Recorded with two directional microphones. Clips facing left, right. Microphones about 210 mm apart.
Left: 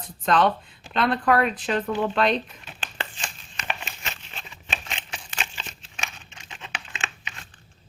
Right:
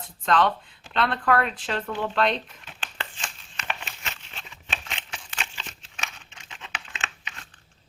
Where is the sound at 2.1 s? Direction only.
20° left (ahead or behind).